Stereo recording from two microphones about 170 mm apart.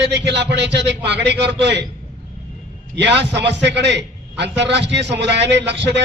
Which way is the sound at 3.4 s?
90° right.